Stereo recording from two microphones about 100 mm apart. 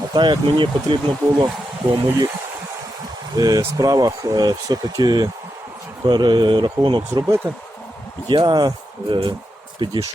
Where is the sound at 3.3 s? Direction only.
40° right (ahead or behind).